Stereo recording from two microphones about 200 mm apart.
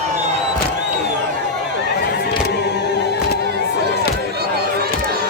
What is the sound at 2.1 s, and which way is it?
Vehicle, 55° left (ahead or behind).